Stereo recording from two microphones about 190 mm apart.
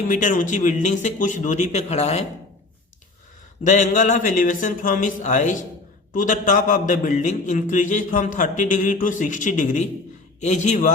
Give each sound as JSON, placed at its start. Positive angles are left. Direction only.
{"t": 0.1, "sound": "a man's voice", "side_deg": 45}
{"t": 3.7, "sound": "a man's voice", "side_deg": 40}